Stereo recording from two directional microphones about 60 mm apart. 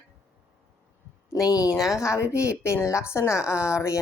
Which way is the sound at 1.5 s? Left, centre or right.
Left.